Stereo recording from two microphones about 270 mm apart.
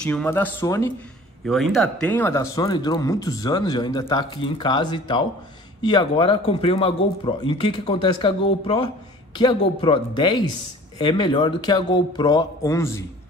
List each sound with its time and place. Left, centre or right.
0.0 s speech: centre
1.4 s speech: centre